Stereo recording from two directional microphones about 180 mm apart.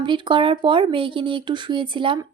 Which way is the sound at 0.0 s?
25° right (ahead or behind).